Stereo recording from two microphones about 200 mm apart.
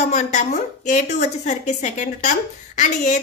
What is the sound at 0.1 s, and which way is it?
A woman's voice, 35° left (ahead or behind).